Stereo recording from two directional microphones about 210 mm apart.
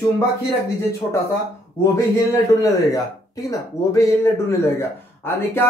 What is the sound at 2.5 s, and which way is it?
Speech, 15° left (ahead or behind).